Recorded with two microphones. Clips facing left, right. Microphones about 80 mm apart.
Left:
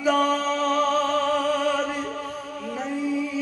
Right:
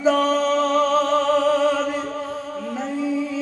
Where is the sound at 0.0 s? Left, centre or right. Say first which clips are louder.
Right 3 dB; right.